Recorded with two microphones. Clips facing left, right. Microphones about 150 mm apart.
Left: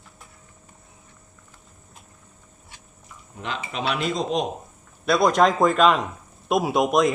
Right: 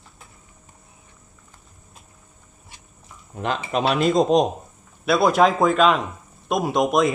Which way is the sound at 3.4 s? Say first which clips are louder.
Right 7 dB; 45° right (ahead or behind).